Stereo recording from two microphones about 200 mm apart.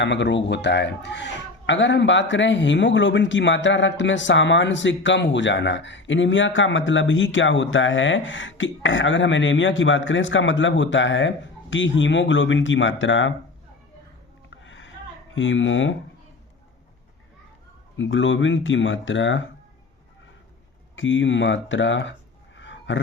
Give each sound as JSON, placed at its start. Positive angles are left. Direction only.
{"t": 0.0, "sound": "speech", "side_deg": 60}
{"t": 14.5, "sound": "a sound", "side_deg": 70}
{"t": 15.4, "sound": "speech", "side_deg": 70}
{"t": 17.9, "sound": "speech", "side_deg": 70}
{"t": 20.9, "sound": "speech", "side_deg": 70}
{"t": 22.5, "sound": "roar", "side_deg": 65}